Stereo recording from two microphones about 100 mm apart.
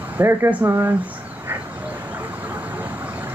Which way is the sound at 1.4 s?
15° right (ahead or behind).